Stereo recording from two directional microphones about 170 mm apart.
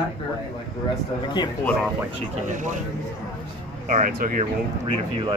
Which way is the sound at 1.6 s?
10° left (ahead or behind).